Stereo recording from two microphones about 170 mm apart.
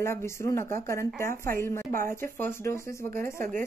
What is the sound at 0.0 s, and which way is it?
Speech, 15° left (ahead or behind).